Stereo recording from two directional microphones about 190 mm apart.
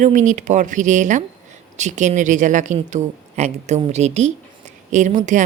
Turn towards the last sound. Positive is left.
turn(degrees=-40)  # may be behind; listen again after turning